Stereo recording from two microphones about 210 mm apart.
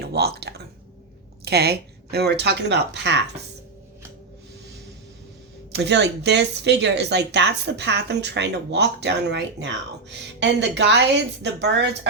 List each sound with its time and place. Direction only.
0.0 s speech: 50° right (ahead or behind)
5.7 s speech: 55° right (ahead or behind)